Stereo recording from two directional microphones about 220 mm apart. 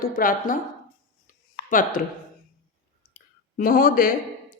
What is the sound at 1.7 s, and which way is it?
Speech, 40° left (ahead or behind).